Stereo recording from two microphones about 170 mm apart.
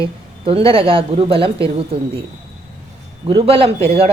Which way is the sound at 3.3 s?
30° right (ahead or behind).